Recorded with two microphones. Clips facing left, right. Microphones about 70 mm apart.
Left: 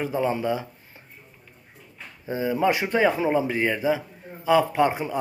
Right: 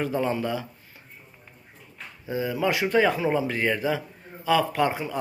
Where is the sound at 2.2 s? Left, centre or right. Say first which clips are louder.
Left 3 dB; left.